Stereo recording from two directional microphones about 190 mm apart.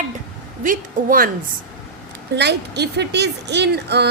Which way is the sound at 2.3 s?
60° right (ahead or behind).